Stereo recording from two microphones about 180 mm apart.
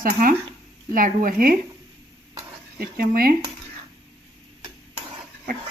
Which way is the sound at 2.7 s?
55° right (ahead or behind).